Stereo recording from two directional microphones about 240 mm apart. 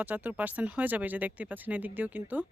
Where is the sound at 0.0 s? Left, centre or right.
Centre.